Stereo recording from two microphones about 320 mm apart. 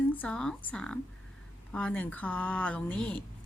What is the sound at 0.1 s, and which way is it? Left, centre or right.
A woman's voice, centre.